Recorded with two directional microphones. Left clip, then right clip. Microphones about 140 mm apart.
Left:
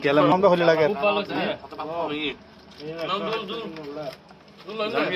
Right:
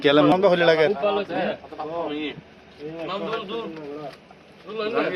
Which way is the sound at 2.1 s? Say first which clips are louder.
Left 1 dB; 20° left (ahead or behind).